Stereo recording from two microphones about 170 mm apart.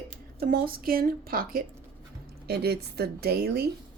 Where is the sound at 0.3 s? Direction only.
65° right (ahead or behind).